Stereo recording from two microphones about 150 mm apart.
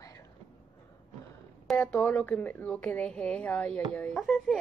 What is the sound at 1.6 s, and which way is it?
A woman's voice, 10° left (ahead or behind).